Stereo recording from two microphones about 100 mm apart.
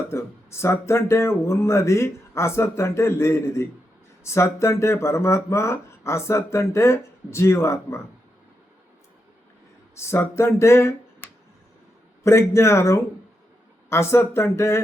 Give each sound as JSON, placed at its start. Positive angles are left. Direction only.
{"t": 0.1, "sound": "speech", "side_deg": 25}
{"t": 9.9, "sound": "speech", "side_deg": 25}
{"t": 12.2, "sound": "speech", "side_deg": 30}